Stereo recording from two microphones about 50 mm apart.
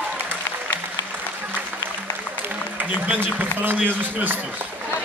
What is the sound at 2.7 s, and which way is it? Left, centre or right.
A man's voice, right.